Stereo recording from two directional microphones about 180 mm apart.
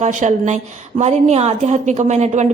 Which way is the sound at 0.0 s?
40° right (ahead or behind).